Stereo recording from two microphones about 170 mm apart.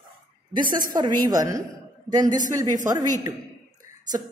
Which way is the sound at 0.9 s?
25° right (ahead or behind).